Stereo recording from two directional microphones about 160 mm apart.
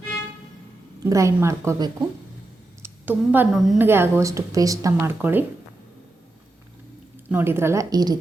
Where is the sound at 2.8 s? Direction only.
10° right (ahead or behind).